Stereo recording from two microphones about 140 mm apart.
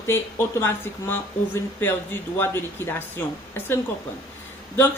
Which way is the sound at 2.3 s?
15° left (ahead or behind).